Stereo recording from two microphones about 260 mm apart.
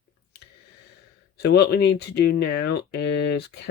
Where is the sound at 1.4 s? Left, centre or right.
Left.